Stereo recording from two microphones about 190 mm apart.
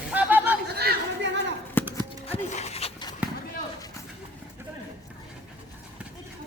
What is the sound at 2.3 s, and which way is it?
Dog, 35° left (ahead or behind).